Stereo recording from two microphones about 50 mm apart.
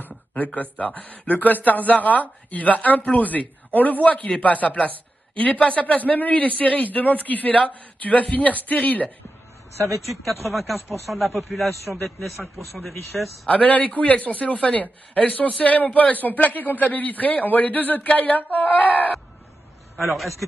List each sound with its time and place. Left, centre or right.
0.0 s a sound: left
0.6 s a man's voice: left
10.5 s a man's voice: centre
13.5 s a man's voice: left
20.1 s a man's voice: centre